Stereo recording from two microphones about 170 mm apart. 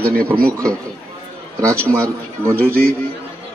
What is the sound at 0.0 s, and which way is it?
Speech, 60° right (ahead or behind).